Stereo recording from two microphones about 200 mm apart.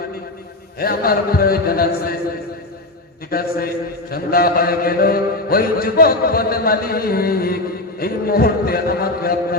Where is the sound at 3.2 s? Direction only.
50° left (ahead or behind).